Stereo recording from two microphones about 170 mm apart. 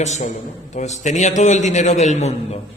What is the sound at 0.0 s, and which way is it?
A man's voice, 45° left (ahead or behind).